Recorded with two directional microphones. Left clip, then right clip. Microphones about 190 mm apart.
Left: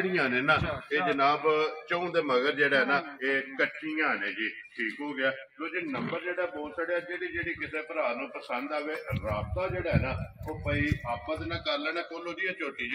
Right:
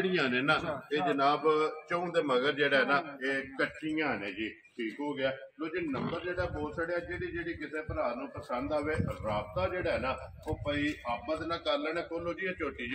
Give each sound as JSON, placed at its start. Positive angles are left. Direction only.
{"t": 0.0, "sound": "a man's voice", "side_deg": 20}
{"t": 1.9, "sound": "a man's voice", "side_deg": 35}
{"t": 2.7, "sound": "a man's voice", "side_deg": 55}
{"t": 3.8, "sound": "a man's voice", "side_deg": 15}
{"t": 6.2, "sound": "a man's voice", "side_deg": 35}
{"t": 7.7, "sound": "a man's voice", "side_deg": 20}
{"t": 9.2, "sound": "a man's voice", "side_deg": -20}
{"t": 11.7, "sound": "a man's voice", "side_deg": -50}